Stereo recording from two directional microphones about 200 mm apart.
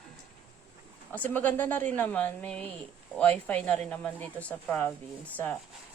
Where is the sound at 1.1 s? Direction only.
10° left (ahead or behind).